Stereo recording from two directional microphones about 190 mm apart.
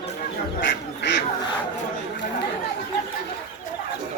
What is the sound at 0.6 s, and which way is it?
Duck, 70° left (ahead or behind).